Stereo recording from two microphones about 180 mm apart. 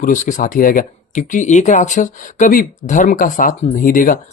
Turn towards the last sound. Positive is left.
turn(degrees=50)  # may be behind; listen again after turning